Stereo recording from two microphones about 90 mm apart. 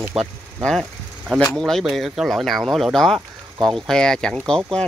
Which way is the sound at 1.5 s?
5° left (ahead or behind).